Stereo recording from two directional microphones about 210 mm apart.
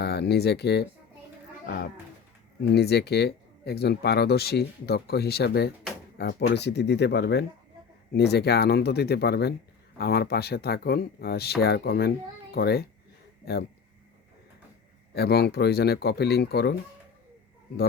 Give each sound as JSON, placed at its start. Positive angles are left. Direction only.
{"t": 0.0, "sound": "speech", "side_deg": 50}
{"t": 15.1, "sound": "speech", "side_deg": 50}